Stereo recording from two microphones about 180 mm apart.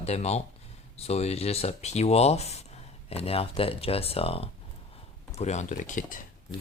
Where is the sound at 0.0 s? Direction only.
35° left (ahead or behind).